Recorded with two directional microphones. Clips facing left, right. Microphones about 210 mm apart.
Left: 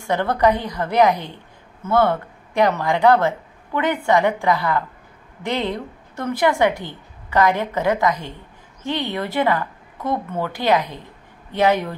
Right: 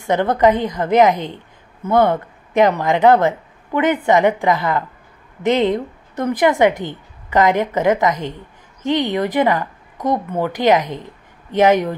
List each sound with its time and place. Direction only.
0.0 s speech: 20° right (ahead or behind)